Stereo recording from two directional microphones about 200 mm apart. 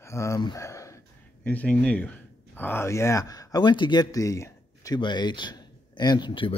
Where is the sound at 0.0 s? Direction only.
15° left (ahead or behind).